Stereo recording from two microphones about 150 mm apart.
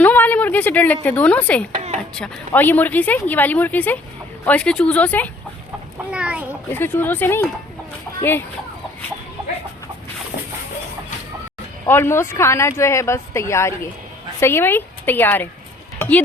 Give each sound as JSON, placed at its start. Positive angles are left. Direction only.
{"t": 0.0, "sound": "a sound", "side_deg": 10}
{"t": 1.0, "sound": "speech", "side_deg": 10}
{"t": 6.1, "sound": "a sound", "side_deg": -10}
{"t": 6.7, "sound": "speech", "side_deg": 15}
{"t": 11.9, "sound": "speech", "side_deg": 15}
{"t": 16.0, "sound": "tick", "side_deg": 10}